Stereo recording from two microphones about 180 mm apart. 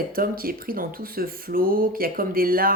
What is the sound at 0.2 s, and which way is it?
Speech, 55° right (ahead or behind).